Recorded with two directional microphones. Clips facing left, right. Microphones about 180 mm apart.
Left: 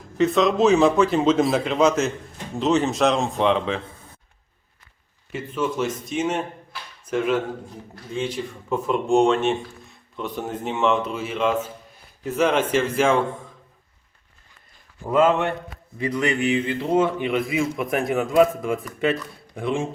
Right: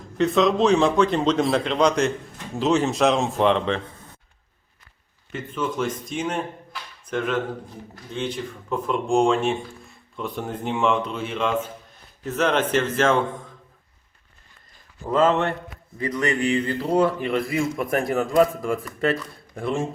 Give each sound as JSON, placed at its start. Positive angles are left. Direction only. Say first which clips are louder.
{"t": 0.2, "sound": "speech", "louder": "left 1 dB", "side_deg": 0}
{"t": 5.3, "sound": "speech", "louder": "left 2 dB", "side_deg": 5}
{"t": 15.0, "sound": "speech", "louder": "left 1 dB", "side_deg": 10}